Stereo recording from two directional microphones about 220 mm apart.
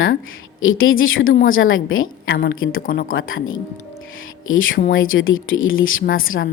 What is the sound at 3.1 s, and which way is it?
Speech, 65° left (ahead or behind).